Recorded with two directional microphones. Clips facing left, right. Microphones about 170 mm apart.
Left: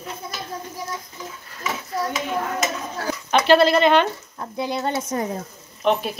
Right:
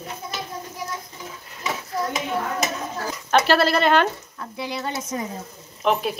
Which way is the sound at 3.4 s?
5° right (ahead or behind).